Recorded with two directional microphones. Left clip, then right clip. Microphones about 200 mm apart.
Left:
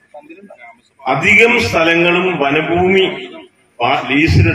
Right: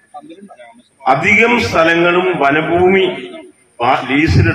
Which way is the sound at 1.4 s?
25° right (ahead or behind).